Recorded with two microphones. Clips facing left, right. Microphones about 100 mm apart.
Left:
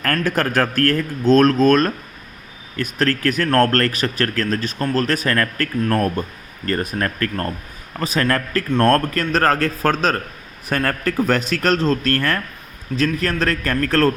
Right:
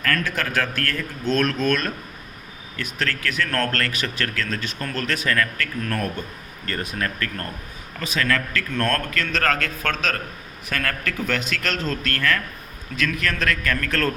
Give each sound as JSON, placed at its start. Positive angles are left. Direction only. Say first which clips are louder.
{"t": 0.0, "sound": "speech", "louder": "left 5 dB", "side_deg": 45}